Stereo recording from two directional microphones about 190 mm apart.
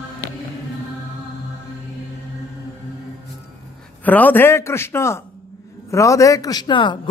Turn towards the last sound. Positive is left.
turn(degrees=25)  # may be behind; listen again after turning